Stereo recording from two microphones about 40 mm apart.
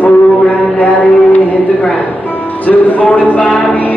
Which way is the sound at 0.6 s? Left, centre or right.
Left.